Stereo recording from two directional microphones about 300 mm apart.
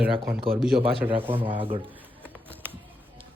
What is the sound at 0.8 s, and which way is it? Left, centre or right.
A man's voice, centre.